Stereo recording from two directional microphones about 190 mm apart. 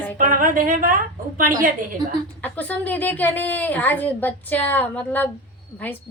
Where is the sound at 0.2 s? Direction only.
45° right (ahead or behind).